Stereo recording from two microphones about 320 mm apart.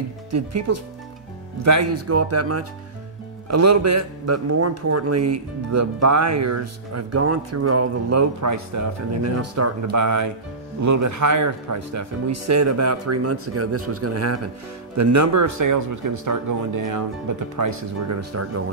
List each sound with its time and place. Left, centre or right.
0.3 s a man's voice: right